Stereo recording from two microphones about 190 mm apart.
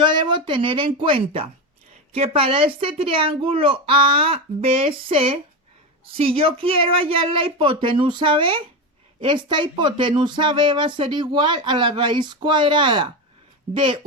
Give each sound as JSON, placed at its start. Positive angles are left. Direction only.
{"t": 0.0, "sound": "speech", "side_deg": -25}